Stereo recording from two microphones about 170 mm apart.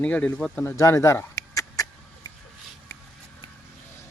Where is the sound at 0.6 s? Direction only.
15° left (ahead or behind).